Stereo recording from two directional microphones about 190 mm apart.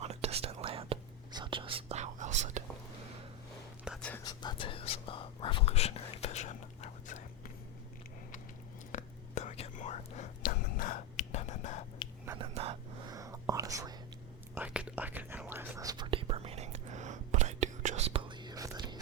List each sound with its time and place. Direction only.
0.0 s whispering: 35° right (ahead or behind)
3.8 s whispering: centre (ahead or behind)
4.1 s whispering: 20° left (ahead or behind); by 7.2 s 40° left (ahead or behind)
8.9 s whispering: 40° left (ahead or behind)
12.0 s whispering: 25° left (ahead or behind)
12.4 s a sound: 30° right (ahead or behind)
13.1 s whispering: 15° right (ahead or behind)
14.5 s whispering: 5° right (ahead or behind)